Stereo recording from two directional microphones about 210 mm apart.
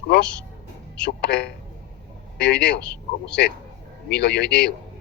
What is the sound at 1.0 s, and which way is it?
Speech, 45° left (ahead or behind).